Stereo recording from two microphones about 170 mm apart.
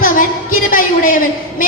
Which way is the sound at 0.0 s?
55° left (ahead or behind).